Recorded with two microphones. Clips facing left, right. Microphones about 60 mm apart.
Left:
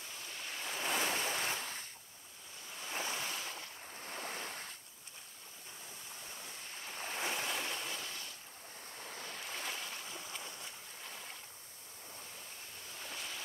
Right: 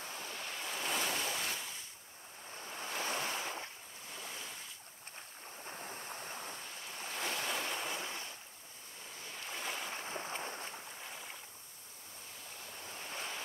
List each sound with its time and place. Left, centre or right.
0.1 s waves: right
0.7 s waves: centre
1.6 s waves: left
2.6 s waves: right
4.0 s waves: left
5.7 s ocean: right
7.2 s boat: centre
7.4 s waves: centre
9.0 s waves: left
9.5 s boat: centre
9.9 s boat: right
13.1 s a sound: right